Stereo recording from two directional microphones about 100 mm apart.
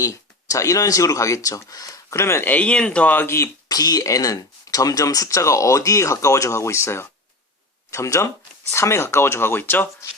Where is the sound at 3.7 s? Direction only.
40° left (ahead or behind).